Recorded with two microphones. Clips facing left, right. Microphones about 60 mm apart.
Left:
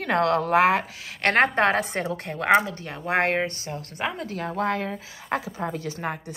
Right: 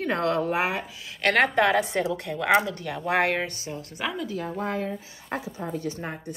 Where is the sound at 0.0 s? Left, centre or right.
Left.